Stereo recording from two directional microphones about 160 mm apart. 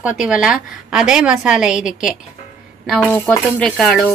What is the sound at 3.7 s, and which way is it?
Speech, centre (ahead or behind).